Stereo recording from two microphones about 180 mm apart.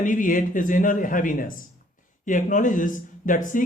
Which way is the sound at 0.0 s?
45° left (ahead or behind).